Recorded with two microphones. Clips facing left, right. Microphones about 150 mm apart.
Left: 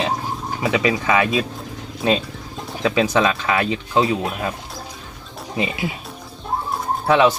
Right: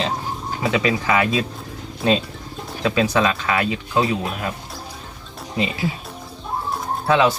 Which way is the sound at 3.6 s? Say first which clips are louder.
Left 2 dB; 25° left (ahead or behind).